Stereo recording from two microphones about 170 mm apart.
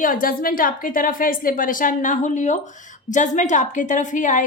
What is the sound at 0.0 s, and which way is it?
A woman's voice, 55° left (ahead or behind).